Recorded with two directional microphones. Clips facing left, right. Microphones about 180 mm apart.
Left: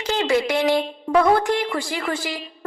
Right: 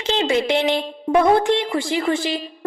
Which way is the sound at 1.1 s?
20° right (ahead or behind).